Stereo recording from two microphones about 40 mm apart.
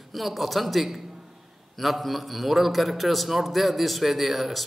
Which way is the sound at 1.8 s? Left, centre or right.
Centre.